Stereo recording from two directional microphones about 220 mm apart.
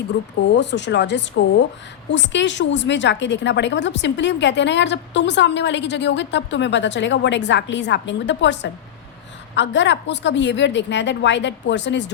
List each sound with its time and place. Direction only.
0.1 s a woman's voice: 50° left (ahead or behind)